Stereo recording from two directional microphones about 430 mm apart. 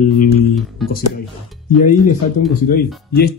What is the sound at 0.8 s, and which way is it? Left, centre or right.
Speech, centre.